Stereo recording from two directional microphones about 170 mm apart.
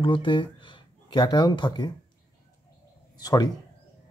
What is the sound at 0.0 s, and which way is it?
Speech, 30° left (ahead or behind).